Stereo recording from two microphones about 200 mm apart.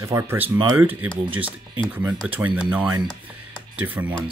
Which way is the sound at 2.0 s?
10° right (ahead or behind).